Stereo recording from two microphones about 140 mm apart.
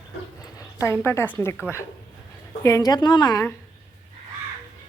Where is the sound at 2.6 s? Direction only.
25° left (ahead or behind).